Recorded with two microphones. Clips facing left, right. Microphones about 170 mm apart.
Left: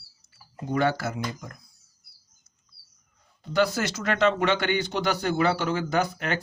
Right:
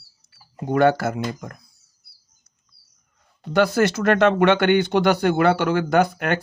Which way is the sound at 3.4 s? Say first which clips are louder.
Right 6 dB; 55° right (ahead or behind).